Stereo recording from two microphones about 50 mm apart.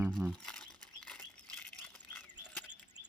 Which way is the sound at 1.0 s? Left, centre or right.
Left.